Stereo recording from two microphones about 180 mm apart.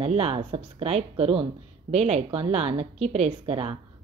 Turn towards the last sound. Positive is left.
turn(degrees=-35)  # may be behind; listen again after turning